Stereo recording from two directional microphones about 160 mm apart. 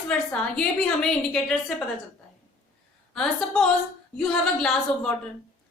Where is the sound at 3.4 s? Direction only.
5° left (ahead or behind).